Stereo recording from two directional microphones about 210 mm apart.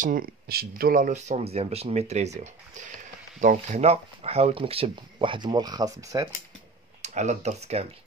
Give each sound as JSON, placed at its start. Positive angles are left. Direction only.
{"t": 0.0, "sound": "speech", "side_deg": -40}
{"t": 7.0, "sound": "speech", "side_deg": -35}